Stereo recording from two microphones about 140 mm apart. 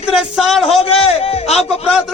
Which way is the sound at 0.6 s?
45° left (ahead or behind).